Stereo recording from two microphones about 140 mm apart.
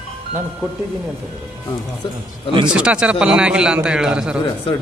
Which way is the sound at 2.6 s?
5° right (ahead or behind).